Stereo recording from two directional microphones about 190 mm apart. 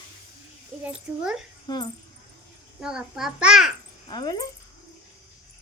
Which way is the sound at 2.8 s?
5° right (ahead or behind).